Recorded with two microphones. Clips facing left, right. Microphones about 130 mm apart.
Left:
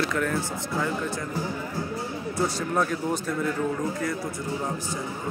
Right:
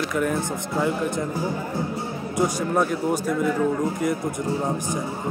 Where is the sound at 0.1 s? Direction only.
15° right (ahead or behind).